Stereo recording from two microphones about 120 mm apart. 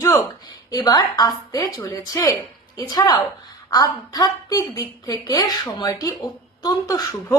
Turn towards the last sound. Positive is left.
turn(degrees=35)  # may be behind; listen again after turning